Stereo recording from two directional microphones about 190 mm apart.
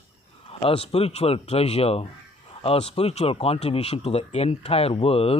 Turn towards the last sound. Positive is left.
turn(degrees=30)  # may be behind; listen again after turning